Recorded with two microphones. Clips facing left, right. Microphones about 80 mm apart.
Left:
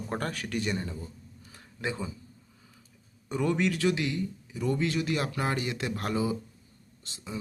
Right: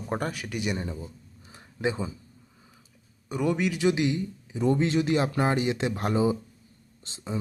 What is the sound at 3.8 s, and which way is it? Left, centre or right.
Speech, right.